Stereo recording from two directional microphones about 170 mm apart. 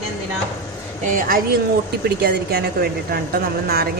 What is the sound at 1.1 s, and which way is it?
A woman's voice, 60° right (ahead or behind).